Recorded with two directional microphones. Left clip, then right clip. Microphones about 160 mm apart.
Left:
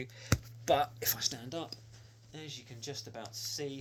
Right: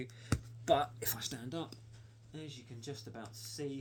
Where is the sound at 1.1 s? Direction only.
50° right (ahead or behind).